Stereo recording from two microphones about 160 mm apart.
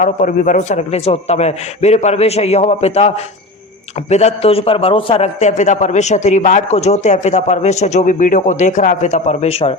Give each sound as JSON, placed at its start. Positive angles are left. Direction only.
{"t": 0.0, "sound": "a man's voice", "side_deg": 50}
{"t": 4.1, "sound": "a man's voice", "side_deg": 45}